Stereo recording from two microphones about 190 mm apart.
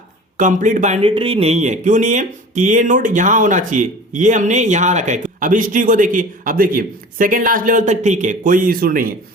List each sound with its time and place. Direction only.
0.3 s speech: 45° right (ahead or behind)